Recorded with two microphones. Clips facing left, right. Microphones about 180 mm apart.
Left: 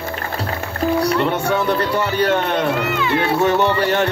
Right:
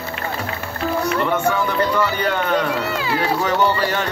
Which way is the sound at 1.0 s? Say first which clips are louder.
Left 1 dB; 30° left (ahead or behind).